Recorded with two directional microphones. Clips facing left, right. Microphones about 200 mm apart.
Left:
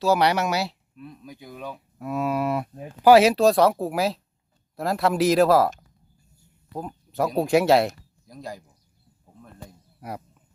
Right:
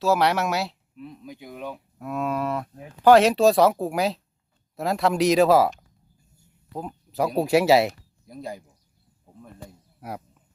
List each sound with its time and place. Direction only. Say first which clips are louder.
0.0 s speech: left 1 dB; centre (ahead or behind)
6.7 s speech: even; centre (ahead or behind)
8.3 s speech: right 2 dB; 25° right (ahead or behind)
10.0 s speech: even; 5° right (ahead or behind)